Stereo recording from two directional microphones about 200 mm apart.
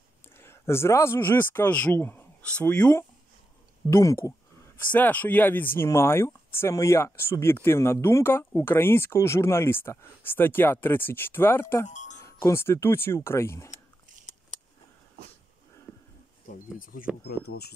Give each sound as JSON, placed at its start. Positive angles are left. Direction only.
{"t": 0.4, "sound": "speech", "side_deg": 10}
{"t": 11.9, "sound": "music", "side_deg": 35}
{"t": 12.2, "sound": "speech", "side_deg": 15}
{"t": 16.7, "sound": "speech", "side_deg": 45}
{"t": 17.0, "sound": "speech", "side_deg": -5}
{"t": 17.5, "sound": "speech", "side_deg": 55}